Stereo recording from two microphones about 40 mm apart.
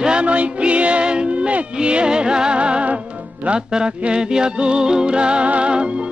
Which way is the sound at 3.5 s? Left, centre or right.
Centre.